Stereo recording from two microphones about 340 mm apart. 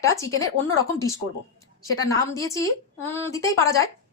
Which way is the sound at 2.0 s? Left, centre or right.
Centre.